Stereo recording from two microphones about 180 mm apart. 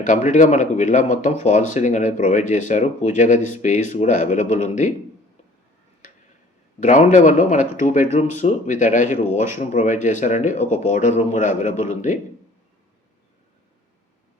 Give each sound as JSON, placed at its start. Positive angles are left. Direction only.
{"t": 0.0, "sound": "speech", "side_deg": 45}
{"t": 6.7, "sound": "speech", "side_deg": 40}